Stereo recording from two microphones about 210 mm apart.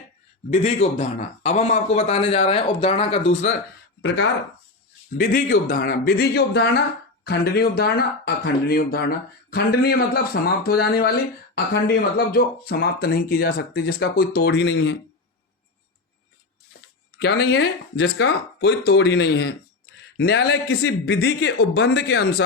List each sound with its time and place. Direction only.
0.5 s speech: 30° left (ahead or behind)
4.0 s speech: 60° left (ahead or behind)
5.1 s speech: 45° left (ahead or behind)
17.2 s speech: 55° left (ahead or behind)